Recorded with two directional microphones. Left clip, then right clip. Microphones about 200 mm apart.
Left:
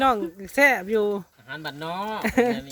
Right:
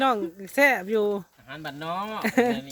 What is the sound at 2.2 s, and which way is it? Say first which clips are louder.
Speech: left 1 dB; 5° right (ahead or behind).